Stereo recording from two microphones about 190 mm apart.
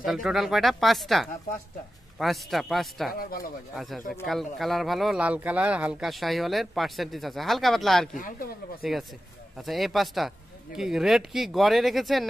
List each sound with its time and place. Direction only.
0.0 s speech: centre (ahead or behind)
3.2 s speech: 50° left (ahead or behind)
3.7 s speech: centre (ahead or behind)
8.1 s speech: 45° left (ahead or behind)
9.6 s speech: centre (ahead or behind)